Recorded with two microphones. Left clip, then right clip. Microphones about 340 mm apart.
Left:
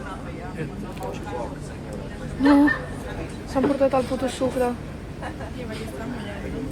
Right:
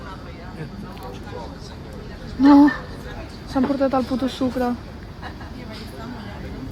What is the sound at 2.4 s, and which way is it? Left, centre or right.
A woman's voice, right.